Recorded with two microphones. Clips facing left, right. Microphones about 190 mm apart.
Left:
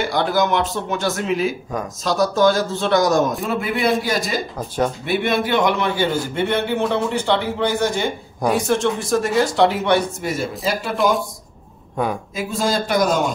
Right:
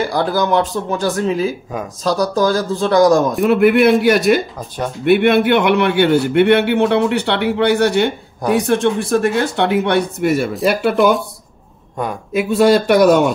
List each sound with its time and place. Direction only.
0.0 s speech: 35° right (ahead or behind)
3.4 s a man's voice: 65° right (ahead or behind)
11.0 s speech: centre (ahead or behind)
12.3 s speech: 65° right (ahead or behind)